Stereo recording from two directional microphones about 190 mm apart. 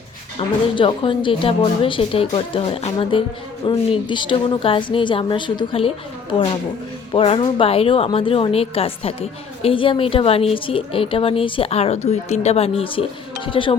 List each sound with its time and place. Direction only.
0.3 s a woman's voice: 25° left (ahead or behind)
7.1 s a woman's voice: 25° left (ahead or behind)